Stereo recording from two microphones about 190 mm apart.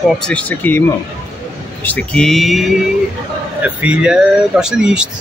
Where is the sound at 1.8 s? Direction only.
5° left (ahead or behind).